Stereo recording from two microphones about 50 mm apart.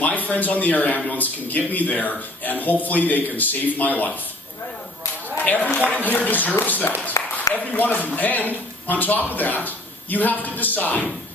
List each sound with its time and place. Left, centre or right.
0.0 s speech: left
5.4 s speech: left